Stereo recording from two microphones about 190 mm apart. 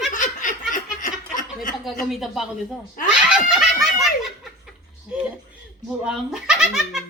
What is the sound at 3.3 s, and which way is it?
Snicker, 5° right (ahead or behind).